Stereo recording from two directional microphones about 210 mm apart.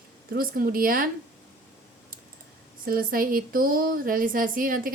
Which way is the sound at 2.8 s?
45° right (ahead or behind).